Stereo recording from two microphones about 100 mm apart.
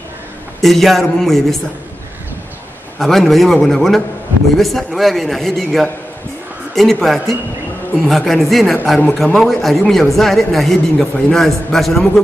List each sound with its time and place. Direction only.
0.6 s speech: centre (ahead or behind)
3.0 s speech: 5° left (ahead or behind)